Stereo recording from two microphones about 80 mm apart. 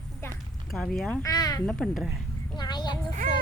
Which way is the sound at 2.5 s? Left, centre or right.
Left.